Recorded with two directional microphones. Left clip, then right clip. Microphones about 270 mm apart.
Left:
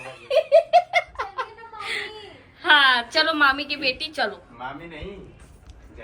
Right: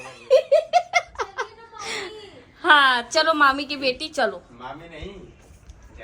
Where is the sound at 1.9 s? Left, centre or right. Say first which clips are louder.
Left 2 dB; centre.